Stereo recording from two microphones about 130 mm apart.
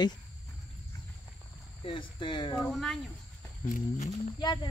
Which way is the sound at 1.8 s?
40° left (ahead or behind).